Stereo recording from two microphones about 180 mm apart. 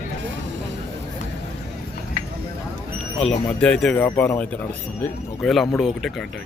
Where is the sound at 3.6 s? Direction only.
5° left (ahead or behind).